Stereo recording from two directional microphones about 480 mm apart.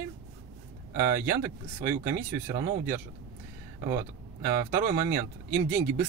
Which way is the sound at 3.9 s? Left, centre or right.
Centre.